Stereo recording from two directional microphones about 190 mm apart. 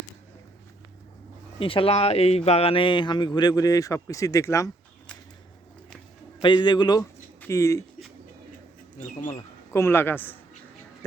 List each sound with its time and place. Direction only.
1.5 s speech: 30° left (ahead or behind)
6.4 s speech: 25° left (ahead or behind)
9.0 s speech: 30° left (ahead or behind)
9.7 s a man's voice: 15° left (ahead or behind)